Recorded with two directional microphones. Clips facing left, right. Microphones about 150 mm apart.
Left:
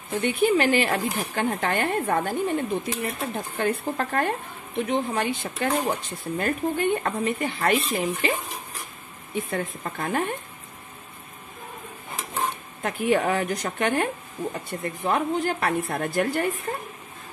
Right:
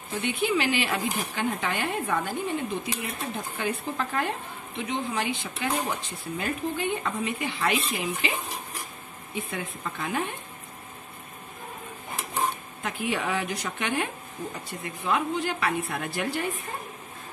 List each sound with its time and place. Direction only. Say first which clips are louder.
0.2 s speech: left 5 dB; 50° left (ahead or behind)
9.5 s speech: left 5 dB; 45° left (ahead or behind)
12.8 s speech: left 7 dB; 50° left (ahead or behind)